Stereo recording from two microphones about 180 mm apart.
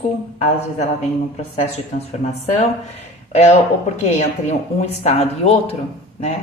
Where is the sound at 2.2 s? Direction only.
35° left (ahead or behind).